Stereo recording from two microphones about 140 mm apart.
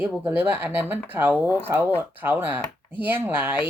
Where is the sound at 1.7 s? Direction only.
15° right (ahead or behind).